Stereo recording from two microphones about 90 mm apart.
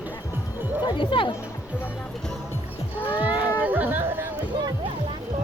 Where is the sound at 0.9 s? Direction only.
70° left (ahead or behind).